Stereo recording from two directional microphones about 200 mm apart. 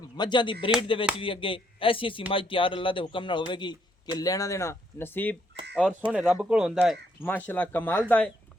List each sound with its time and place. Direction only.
0.2 s a man's voice: 25° left (ahead or behind)
6.1 s speech: 5° right (ahead or behind)